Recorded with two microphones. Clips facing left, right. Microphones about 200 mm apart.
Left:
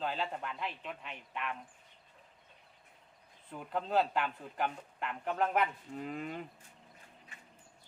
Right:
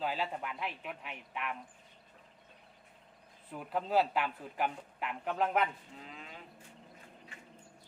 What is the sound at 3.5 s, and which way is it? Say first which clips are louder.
A man's voice: right 1 dB; 5° right (ahead or behind).